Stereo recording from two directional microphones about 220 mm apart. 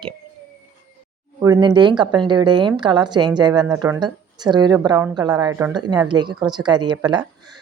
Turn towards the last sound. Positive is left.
turn(degrees=-20)  # may be behind; listen again after turning